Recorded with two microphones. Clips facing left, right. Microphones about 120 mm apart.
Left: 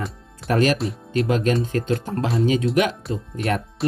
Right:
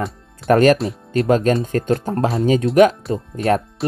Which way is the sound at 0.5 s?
50° right (ahead or behind).